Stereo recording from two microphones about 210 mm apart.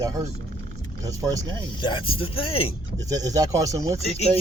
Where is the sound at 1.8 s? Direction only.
25° left (ahead or behind).